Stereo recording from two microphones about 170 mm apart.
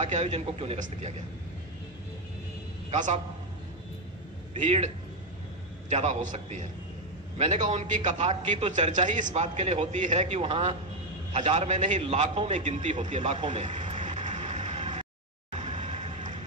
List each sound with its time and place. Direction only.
0.0 s a man's voice: 40° right (ahead or behind)
2.9 s a man's voice: 45° right (ahead or behind)
4.6 s a man's voice: 40° right (ahead or behind)
13.1 s music: 40° right (ahead or behind)